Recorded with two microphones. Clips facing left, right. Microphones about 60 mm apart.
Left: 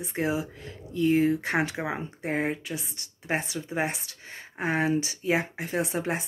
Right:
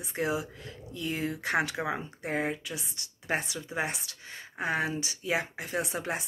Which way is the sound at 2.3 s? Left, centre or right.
Left.